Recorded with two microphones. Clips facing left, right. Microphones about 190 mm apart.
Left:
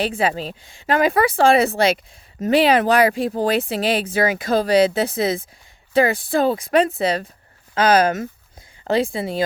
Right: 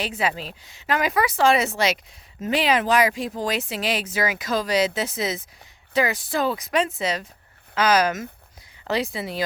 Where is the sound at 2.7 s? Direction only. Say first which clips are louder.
Left 4 dB; 60° left (ahead or behind).